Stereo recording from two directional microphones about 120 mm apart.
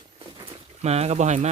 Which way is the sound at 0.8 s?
60° right (ahead or behind).